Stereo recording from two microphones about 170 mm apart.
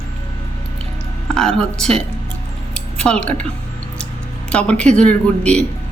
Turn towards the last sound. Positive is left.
turn(degrees=5)  # may be behind; listen again after turning